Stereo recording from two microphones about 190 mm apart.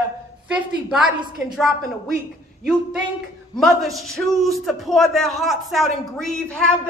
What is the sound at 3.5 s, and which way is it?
A man's voice, centre (ahead or behind).